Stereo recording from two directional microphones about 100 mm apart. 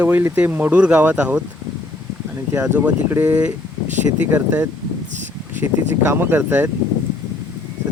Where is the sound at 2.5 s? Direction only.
20° right (ahead or behind).